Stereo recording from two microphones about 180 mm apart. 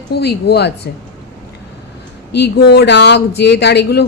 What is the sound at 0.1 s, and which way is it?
Speech, 65° left (ahead or behind).